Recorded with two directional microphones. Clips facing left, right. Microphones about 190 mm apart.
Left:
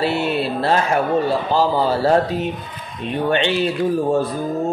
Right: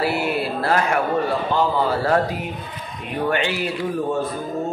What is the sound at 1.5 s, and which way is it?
A man's voice, 30° left (ahead or behind).